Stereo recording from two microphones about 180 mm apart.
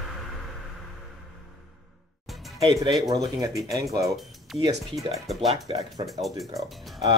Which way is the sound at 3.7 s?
20° right (ahead or behind).